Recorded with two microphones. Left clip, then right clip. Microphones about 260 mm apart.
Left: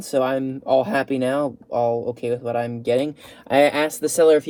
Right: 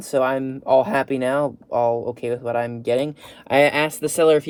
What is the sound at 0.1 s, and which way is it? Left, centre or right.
Speech, centre.